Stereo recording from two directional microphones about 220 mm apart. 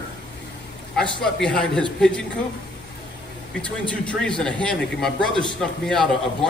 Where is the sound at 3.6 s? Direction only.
5° left (ahead or behind).